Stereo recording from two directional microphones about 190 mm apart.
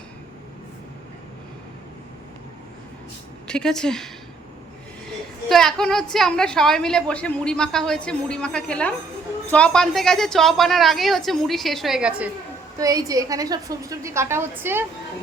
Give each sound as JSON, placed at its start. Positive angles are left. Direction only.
{"t": 3.4, "sound": "a woman's voice", "side_deg": 5}
{"t": 5.5, "sound": "a woman's voice", "side_deg": 5}
{"t": 12.8, "sound": "a woman's voice", "side_deg": -20}